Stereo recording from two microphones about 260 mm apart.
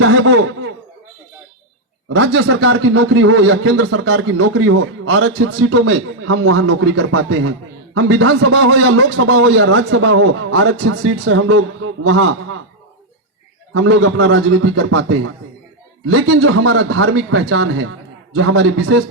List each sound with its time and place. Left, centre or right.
0.0 s speech: right
2.0 s speech: right
13.7 s speech: right